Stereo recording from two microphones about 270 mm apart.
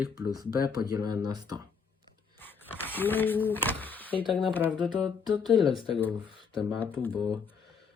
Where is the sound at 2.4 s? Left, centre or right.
Centre.